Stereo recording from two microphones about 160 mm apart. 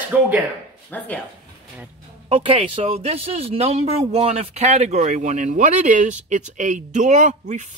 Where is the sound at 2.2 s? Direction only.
35° right (ahead or behind).